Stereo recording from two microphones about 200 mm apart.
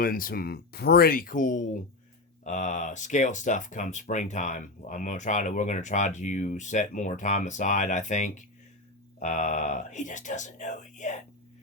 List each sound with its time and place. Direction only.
0.0 s speech: 45° left (ahead or behind)